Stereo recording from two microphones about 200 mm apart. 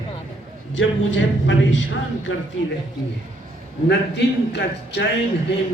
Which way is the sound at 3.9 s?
60° left (ahead or behind).